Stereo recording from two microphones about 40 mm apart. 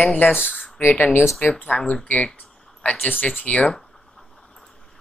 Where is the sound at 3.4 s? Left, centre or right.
Left.